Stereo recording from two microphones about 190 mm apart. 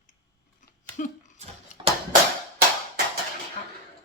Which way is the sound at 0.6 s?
40° left (ahead or behind).